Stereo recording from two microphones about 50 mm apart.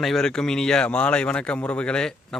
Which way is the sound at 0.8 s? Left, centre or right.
Left.